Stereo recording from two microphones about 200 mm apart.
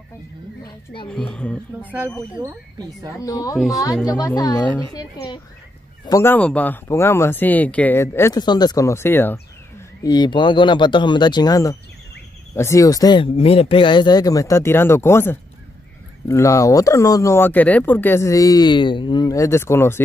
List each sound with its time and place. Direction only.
1.1 s a woman's voice: 5° left (ahead or behind)
1.8 s speech: 10° right (ahead or behind)
3.2 s speech: 15° left (ahead or behind)
10.0 s speech: 20° left (ahead or behind)